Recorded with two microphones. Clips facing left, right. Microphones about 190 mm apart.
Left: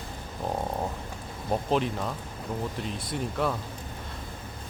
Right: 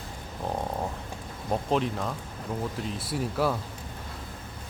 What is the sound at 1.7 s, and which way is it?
Speech, centre (ahead or behind).